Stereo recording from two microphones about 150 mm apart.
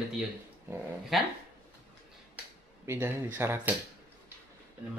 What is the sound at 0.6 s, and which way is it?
Speech, 10° right (ahead or behind).